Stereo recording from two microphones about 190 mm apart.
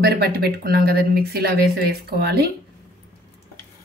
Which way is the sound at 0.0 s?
55° right (ahead or behind).